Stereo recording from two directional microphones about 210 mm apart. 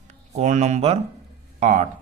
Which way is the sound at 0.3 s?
35° right (ahead or behind).